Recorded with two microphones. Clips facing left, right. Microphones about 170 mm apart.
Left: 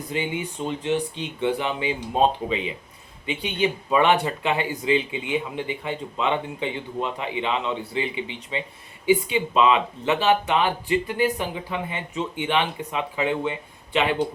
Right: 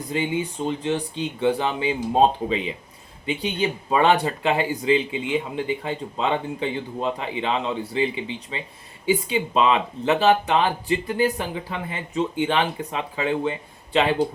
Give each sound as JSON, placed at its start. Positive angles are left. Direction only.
{"t": 0.1, "sound": "speech", "side_deg": -35}